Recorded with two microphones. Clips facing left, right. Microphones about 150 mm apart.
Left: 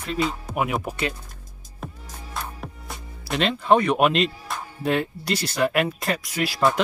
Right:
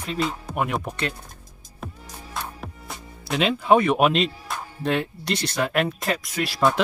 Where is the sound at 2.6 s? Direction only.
Centre (ahead or behind).